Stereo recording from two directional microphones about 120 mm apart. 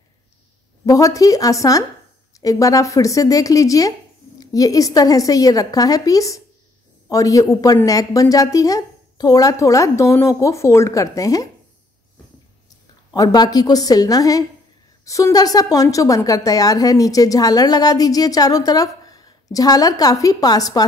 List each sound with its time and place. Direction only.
0.8 s a woman's voice: 30° left (ahead or behind)
12.6 s a woman's voice: 30° left (ahead or behind)